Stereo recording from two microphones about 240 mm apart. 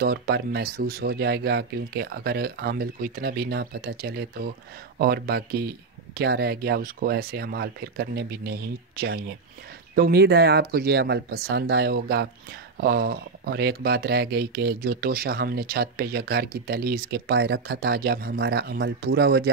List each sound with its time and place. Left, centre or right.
0.0 s speech: right